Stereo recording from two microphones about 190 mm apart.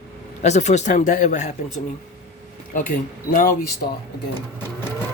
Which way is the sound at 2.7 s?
45° left (ahead or behind).